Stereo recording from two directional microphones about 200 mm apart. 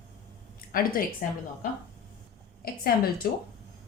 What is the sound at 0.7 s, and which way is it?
Speech, 45° left (ahead or behind).